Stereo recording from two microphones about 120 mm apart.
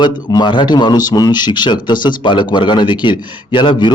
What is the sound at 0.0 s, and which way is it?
A man's voice, 35° left (ahead or behind).